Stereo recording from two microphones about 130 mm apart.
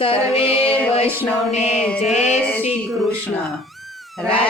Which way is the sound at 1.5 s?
60° left (ahead or behind).